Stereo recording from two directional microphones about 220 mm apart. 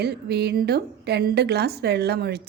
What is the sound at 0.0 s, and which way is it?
A woman's voice, 45° right (ahead or behind).